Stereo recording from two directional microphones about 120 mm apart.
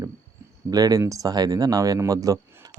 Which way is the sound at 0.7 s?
30° right (ahead or behind).